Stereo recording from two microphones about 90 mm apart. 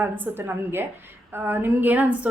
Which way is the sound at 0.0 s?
20° right (ahead or behind).